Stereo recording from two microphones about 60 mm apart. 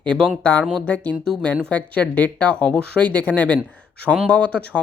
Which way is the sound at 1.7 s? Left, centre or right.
Left.